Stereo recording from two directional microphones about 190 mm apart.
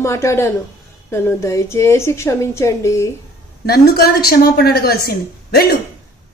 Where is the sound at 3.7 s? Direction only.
55° left (ahead or behind).